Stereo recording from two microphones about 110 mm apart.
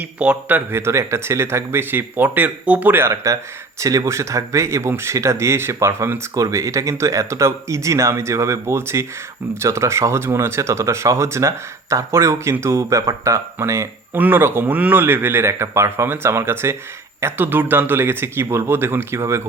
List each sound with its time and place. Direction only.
0.0 s speech: 15° right (ahead or behind)